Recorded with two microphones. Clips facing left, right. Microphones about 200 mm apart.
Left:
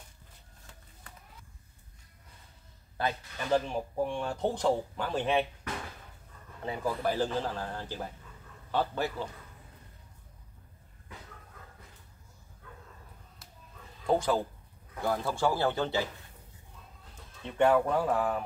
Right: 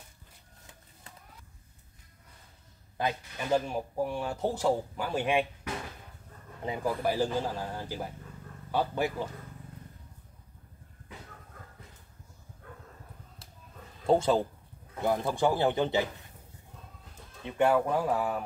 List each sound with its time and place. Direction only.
3.0 s speech: 10° right (ahead or behind)
14.0 s speech: 25° right (ahead or behind)
17.5 s speech: 10° right (ahead or behind)